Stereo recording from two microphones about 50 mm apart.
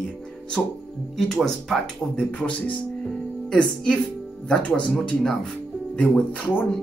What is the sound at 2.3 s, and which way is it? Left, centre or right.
Speech, left.